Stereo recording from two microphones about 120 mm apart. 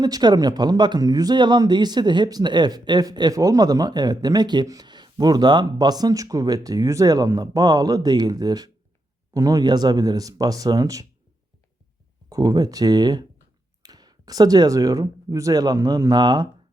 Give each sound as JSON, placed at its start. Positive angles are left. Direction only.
{"t": 0.0, "sound": "speech", "side_deg": -35}
{"t": 12.3, "sound": "speech", "side_deg": -30}